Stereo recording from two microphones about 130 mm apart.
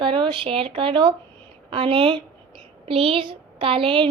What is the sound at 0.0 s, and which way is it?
A woman's voice, 40° right (ahead or behind).